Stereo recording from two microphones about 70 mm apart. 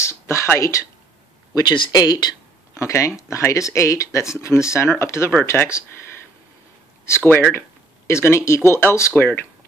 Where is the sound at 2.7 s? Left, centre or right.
Left.